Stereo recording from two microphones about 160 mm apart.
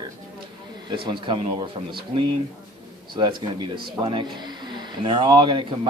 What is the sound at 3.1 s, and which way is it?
Speech, 30° right (ahead or behind).